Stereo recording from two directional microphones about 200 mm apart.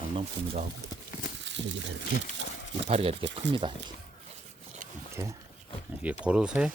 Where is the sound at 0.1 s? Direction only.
30° right (ahead or behind).